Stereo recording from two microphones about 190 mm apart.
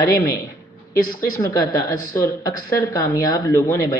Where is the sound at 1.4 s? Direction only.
20° left (ahead or behind).